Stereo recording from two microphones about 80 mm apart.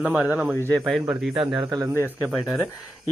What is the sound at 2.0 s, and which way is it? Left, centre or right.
Speech, left.